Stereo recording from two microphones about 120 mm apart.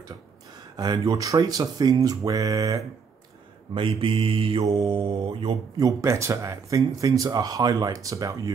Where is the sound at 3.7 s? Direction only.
45° right (ahead or behind).